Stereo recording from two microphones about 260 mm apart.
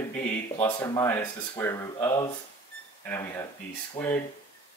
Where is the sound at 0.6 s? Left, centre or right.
Centre.